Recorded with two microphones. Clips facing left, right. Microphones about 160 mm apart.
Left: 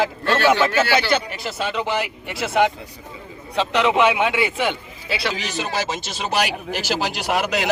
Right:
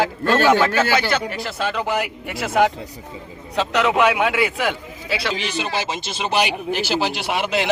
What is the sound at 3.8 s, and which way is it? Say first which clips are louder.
A man's voice: even; centre (ahead or behind).